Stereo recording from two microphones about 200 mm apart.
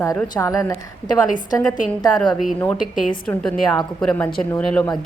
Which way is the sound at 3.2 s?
5° left (ahead or behind).